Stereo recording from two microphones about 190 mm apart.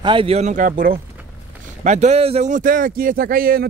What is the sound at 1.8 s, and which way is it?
Speech, 40° right (ahead or behind).